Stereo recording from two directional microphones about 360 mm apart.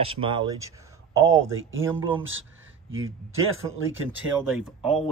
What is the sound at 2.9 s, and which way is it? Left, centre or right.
Speech, right.